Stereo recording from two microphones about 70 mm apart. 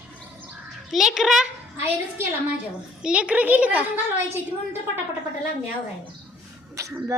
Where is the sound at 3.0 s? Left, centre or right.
Centre.